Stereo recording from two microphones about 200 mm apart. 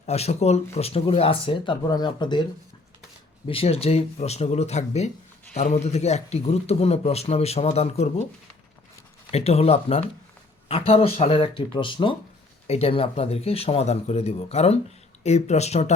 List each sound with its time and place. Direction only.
0.0 s speech: 35° left (ahead or behind)
3.4 s a man's voice: 30° left (ahead or behind)
9.3 s a man's voice: 30° left (ahead or behind)